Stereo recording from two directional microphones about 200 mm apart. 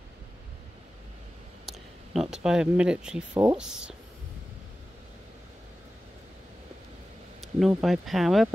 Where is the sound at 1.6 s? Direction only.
Centre (ahead or behind).